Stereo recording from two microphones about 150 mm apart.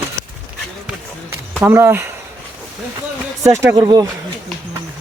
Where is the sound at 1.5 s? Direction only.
15° right (ahead or behind).